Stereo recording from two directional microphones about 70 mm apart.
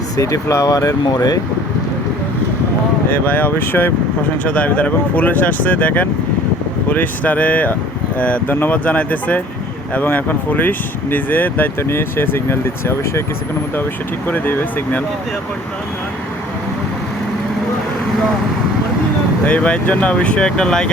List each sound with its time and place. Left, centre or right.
0.2 s speech: left
1.0 s speech: left
3.1 s speech: left
4.4 s speech: centre; by 13.2 s left
14.3 s speech: left
19.5 s speech: centre